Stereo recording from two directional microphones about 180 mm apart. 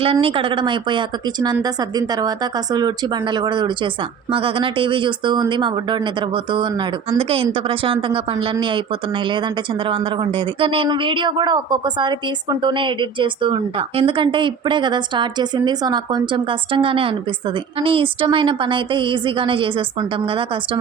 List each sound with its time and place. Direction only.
0.0 s speech: 30° right (ahead or behind)